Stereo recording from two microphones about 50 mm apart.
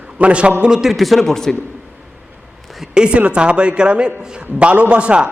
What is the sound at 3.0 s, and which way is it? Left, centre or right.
A man's voice, right.